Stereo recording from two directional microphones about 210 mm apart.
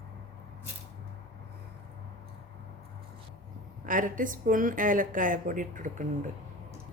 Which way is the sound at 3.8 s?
40° right (ahead or behind).